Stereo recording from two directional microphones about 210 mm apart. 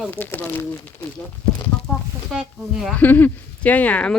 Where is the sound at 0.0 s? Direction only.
10° left (ahead or behind).